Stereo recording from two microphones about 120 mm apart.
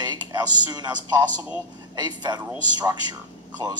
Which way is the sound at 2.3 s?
35° right (ahead or behind).